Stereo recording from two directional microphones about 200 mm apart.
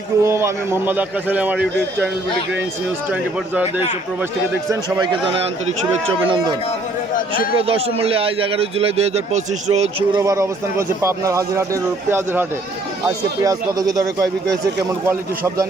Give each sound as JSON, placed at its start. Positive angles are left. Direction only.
{"t": 0.2, "sound": "speech", "side_deg": -15}
{"t": 3.1, "sound": "speech", "side_deg": -10}
{"t": 4.7, "sound": "speech", "side_deg": -20}
{"t": 7.7, "sound": "speech", "side_deg": -30}
{"t": 10.2, "sound": "speech", "side_deg": -15}